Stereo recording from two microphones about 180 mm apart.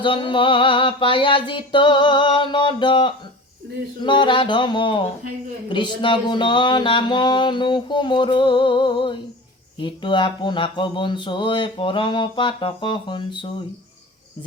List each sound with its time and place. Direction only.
0.0 s speech: 25° left (ahead or behind)